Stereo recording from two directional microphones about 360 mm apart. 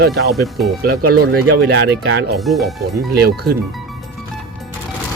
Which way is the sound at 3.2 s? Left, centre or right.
Right.